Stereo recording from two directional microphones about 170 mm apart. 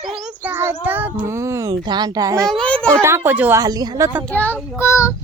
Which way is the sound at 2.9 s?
15° right (ahead or behind).